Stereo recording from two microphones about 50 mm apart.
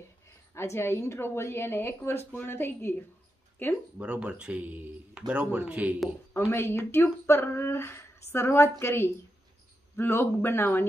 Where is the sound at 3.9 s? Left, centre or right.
Right.